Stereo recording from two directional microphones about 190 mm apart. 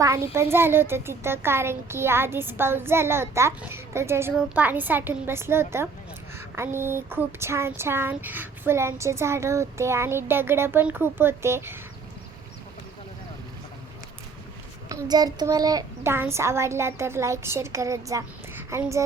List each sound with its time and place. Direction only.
0.0 s speech: 15° right (ahead or behind)
14.8 s speech: 20° right (ahead or behind)